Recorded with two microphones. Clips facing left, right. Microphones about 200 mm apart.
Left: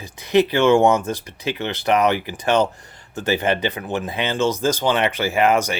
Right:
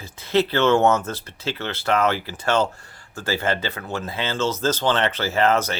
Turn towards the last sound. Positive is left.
turn(degrees=15)  # may be behind; listen again after turning